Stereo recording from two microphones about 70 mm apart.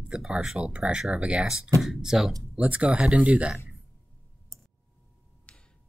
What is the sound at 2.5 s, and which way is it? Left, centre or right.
Speech, centre.